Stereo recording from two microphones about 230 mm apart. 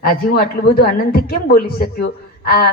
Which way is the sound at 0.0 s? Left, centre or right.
Left.